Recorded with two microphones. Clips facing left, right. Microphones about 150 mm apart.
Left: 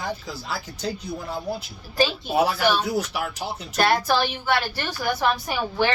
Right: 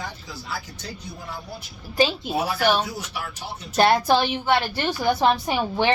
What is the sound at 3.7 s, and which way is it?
A woman's voice, 20° right (ahead or behind).